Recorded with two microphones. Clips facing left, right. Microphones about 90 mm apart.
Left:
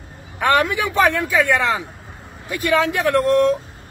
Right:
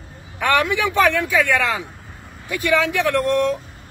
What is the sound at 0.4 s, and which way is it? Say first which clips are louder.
Speech: left 1 dB; 35° left (ahead or behind).